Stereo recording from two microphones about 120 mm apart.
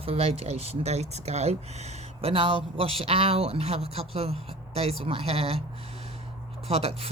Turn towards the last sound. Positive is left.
turn(degrees=-60)  # may be behind; listen again after turning